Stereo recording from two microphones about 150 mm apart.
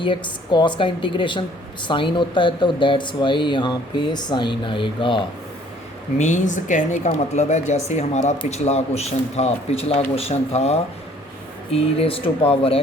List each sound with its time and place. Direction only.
0.0 s a woman's voice: 30° left (ahead or behind)
6.1 s a man's voice: 55° left (ahead or behind); by 12.8 s 35° left (ahead or behind)